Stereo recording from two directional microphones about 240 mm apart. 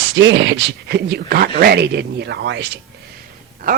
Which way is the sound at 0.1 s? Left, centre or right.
Right.